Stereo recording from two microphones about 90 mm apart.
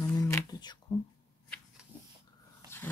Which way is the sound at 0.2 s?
45° left (ahead or behind).